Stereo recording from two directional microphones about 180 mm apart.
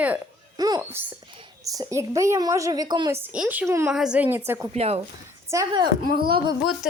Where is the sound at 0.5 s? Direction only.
20° right (ahead or behind).